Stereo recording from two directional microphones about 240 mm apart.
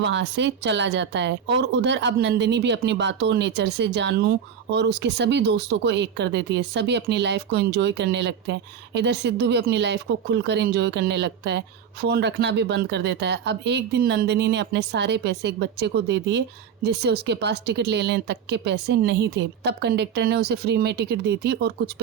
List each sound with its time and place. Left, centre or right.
0.0 s speech: right